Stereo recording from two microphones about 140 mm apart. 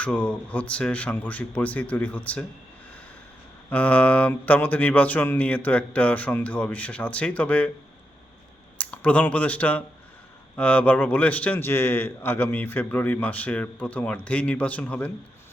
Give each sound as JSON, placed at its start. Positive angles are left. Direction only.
{"t": 0.0, "sound": "a man's voice", "side_deg": 10}
{"t": 3.7, "sound": "a man's voice", "side_deg": 10}
{"t": 8.8, "sound": "a man's voice", "side_deg": 10}